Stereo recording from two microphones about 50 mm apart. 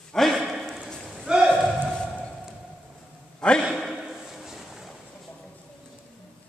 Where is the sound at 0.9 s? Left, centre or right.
Centre.